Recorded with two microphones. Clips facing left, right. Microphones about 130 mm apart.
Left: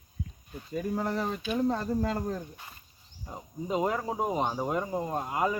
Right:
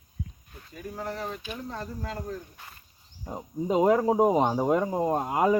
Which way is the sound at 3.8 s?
75° right (ahead or behind).